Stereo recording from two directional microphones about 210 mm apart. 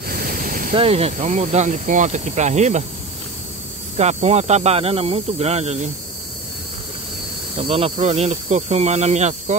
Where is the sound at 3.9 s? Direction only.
30° right (ahead or behind).